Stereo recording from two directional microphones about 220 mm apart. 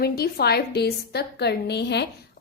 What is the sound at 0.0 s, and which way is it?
A woman's voice, 45° left (ahead or behind).